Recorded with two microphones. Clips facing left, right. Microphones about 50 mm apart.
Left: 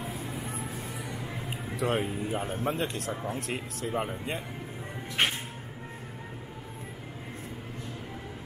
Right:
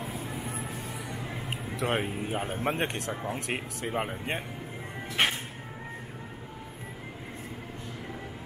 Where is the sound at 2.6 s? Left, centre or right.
Right.